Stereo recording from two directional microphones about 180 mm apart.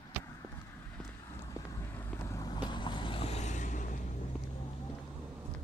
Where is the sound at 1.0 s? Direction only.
15° left (ahead or behind); by 4.0 s 45° left (ahead or behind).